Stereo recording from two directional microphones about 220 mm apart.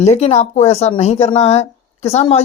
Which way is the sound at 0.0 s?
30° left (ahead or behind).